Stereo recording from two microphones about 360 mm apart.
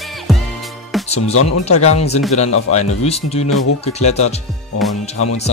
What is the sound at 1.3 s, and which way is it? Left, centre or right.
Speech, left.